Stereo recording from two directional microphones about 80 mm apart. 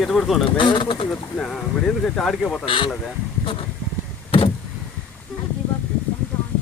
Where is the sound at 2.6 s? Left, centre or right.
Left.